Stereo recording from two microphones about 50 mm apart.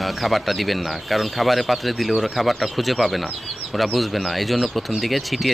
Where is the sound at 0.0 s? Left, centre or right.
Centre.